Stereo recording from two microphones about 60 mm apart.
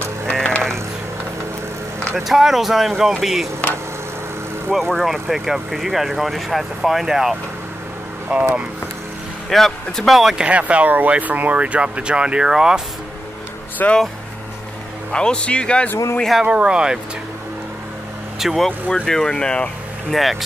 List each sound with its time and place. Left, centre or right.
0.3 s ratchet: centre
2.1 s speech: centre
4.7 s speech: centre
8.3 s speech: centre
9.5 s speech: centre
10.3 s speech: right
13.8 s speech: left
15.1 s a man's voice: centre
16.4 s speech: centre
18.4 s speech: centre
18.7 s a man's voice: centre
20.1 s speech: centre